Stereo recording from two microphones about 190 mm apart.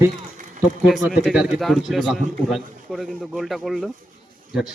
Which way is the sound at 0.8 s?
Centre (ahead or behind).